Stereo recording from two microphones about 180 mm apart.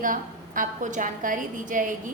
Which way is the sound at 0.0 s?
50° right (ahead or behind).